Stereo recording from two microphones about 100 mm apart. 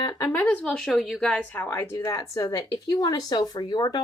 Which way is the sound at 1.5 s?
25° left (ahead or behind).